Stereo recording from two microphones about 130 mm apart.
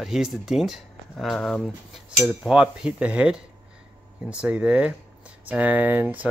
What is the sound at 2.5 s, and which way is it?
Speech, 5° right (ahead or behind).